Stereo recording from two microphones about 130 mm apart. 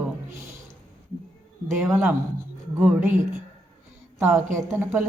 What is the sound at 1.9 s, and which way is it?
Speech, 20° right (ahead or behind).